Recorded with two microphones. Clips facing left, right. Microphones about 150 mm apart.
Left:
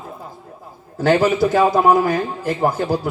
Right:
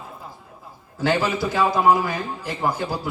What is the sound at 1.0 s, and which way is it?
A man's voice, 45° left (ahead or behind).